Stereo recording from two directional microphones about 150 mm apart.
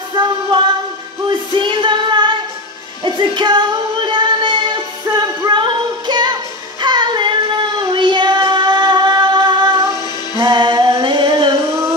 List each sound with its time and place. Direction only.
0.1 s music: 30° right (ahead or behind)